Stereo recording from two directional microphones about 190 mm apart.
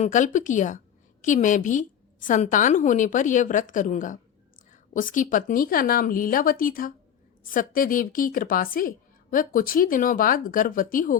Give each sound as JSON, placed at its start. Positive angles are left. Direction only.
{"t": 0.0, "sound": "a woman's voice", "side_deg": 40}